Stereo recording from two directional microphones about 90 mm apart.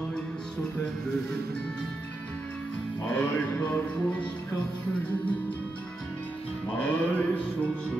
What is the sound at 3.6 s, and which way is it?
Music, 15° left (ahead or behind).